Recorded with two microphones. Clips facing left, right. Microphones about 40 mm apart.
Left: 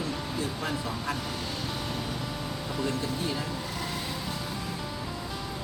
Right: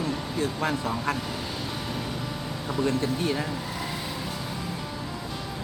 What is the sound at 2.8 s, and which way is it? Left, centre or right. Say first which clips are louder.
Speech: right 6 dB; right.